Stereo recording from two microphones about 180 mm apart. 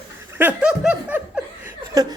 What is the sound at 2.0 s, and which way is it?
Chuckle, 20° right (ahead or behind).